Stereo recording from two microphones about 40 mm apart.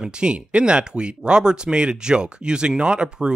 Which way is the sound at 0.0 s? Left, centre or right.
Right.